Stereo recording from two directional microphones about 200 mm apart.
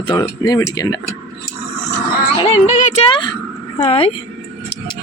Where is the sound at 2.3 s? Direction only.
30° left (ahead or behind).